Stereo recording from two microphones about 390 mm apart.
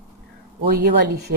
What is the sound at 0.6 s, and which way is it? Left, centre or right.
Speech, right.